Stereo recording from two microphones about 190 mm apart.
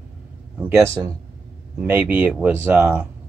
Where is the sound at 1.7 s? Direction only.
5° right (ahead or behind).